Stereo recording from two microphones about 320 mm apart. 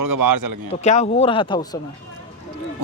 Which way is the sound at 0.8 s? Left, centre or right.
Centre.